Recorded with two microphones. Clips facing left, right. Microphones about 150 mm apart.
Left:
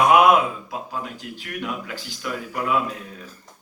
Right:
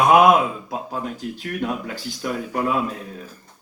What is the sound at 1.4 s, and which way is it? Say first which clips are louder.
A man's voice: right 4 dB; 40° right (ahead or behind).